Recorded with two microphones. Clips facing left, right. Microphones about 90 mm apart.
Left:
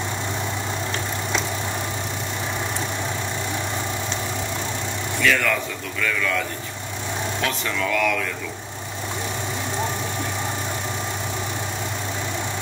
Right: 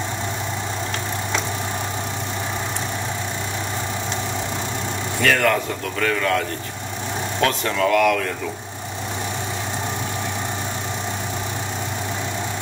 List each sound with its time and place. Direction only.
5.2 s a man's voice: 50° right (ahead or behind)